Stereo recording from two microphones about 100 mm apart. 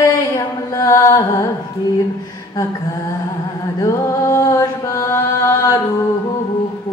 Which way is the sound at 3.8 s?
30° left (ahead or behind).